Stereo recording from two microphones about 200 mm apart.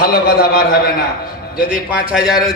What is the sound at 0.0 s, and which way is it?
Speech, 50° left (ahead or behind).